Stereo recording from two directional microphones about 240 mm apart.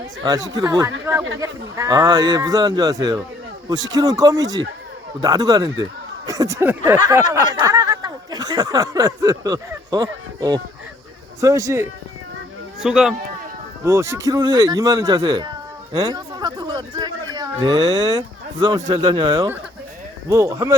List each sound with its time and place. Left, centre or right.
0.2 s a man's voice: centre